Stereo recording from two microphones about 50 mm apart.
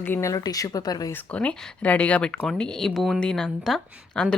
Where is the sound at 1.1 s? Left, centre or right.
Left.